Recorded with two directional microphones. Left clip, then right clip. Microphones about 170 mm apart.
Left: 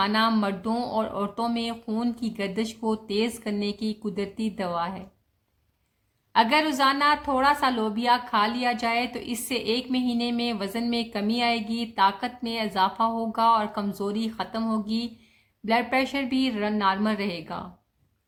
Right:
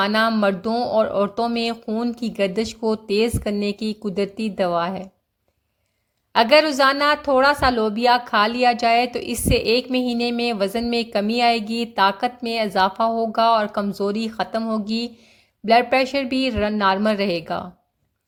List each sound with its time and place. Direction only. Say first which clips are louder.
0.0 s a woman's voice: right 5 dB; 40° right (ahead or behind)
6.3 s a woman's voice: right 6 dB; 40° right (ahead or behind)